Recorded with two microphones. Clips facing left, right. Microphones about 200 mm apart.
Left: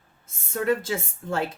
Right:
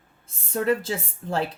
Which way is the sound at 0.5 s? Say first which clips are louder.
Right 1 dB; 30° right (ahead or behind).